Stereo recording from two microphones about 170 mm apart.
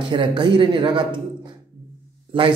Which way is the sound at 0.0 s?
30° right (ahead or behind).